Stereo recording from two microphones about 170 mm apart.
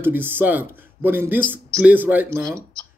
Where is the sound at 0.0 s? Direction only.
10° right (ahead or behind).